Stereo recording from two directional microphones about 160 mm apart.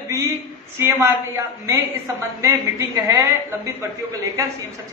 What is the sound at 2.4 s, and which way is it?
A woman's voice, 20° right (ahead or behind).